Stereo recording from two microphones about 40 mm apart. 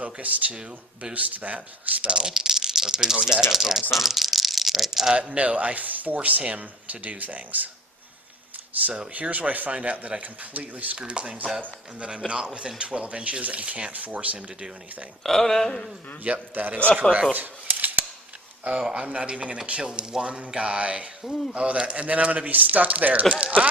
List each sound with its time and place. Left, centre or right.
0.0 s speech: right
2.1 s speech: centre
5.4 s speech: right
8.7 s speech: right
10.9 s speech: right
13.9 s speech: right
15.2 s speech: centre
16.2 s a man's voice: right
17.3 s a sound: right
18.8 s speech: centre
19.0 s speech: right